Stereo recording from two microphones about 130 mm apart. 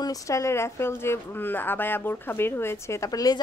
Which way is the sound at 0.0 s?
25° left (ahead or behind).